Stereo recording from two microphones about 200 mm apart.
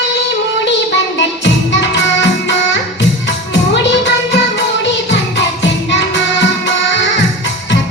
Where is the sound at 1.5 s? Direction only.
60° left (ahead or behind).